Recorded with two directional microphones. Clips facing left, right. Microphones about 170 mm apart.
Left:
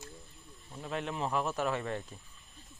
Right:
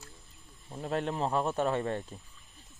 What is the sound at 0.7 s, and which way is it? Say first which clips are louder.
Speech: right 5 dB; 35° right (ahead or behind).